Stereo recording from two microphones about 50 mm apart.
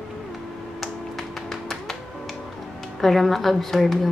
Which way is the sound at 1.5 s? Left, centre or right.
Centre.